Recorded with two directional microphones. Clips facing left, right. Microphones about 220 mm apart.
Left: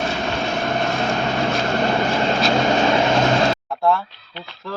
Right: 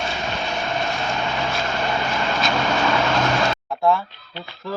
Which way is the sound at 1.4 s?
40° left (ahead or behind).